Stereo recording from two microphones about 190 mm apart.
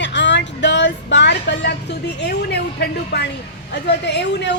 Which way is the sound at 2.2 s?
60° left (ahead or behind).